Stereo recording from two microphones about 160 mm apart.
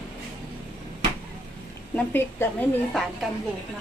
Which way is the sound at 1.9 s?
15° left (ahead or behind).